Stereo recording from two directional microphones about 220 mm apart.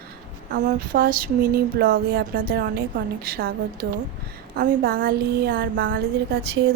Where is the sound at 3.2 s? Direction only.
45° right (ahead or behind).